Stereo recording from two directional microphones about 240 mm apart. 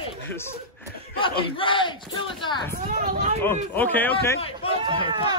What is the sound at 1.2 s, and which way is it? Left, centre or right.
Speech, left.